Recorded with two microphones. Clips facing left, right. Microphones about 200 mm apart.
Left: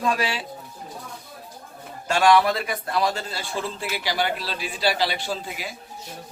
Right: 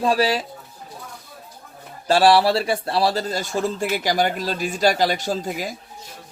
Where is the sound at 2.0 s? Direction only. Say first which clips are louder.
Right 3 dB; 35° right (ahead or behind).